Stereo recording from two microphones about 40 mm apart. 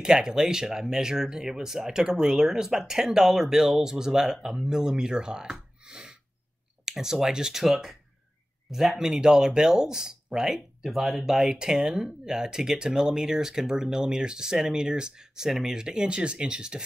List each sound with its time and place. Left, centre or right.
0.0 s speech: centre
10.9 s speech: centre; by 16.8 s right